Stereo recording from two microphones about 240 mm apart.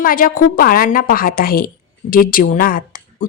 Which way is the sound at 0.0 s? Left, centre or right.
Left.